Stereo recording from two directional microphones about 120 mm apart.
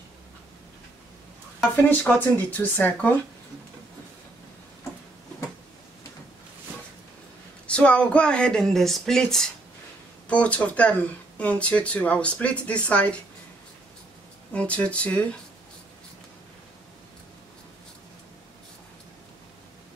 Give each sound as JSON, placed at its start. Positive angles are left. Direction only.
{"t": 1.9, "sound": "speech", "side_deg": 15}
{"t": 7.6, "sound": "speech", "side_deg": 10}
{"t": 14.5, "sound": "speech", "side_deg": 10}